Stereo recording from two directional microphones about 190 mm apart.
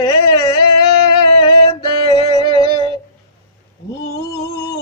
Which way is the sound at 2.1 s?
20° left (ahead or behind).